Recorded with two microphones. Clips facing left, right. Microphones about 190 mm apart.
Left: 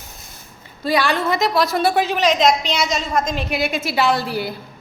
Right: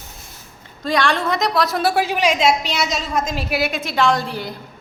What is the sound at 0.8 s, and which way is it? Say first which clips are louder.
A woman's voice: left 1 dB; 5° left (ahead or behind).